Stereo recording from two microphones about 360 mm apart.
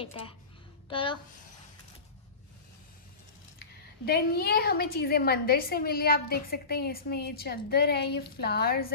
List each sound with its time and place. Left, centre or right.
0.0 s a woman's voice: centre
3.5 s a woman's voice: left